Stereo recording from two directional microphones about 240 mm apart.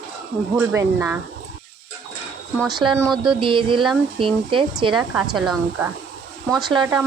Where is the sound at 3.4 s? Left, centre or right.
Right.